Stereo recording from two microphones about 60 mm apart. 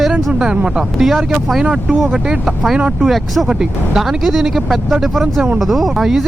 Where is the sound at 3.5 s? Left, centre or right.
Centre.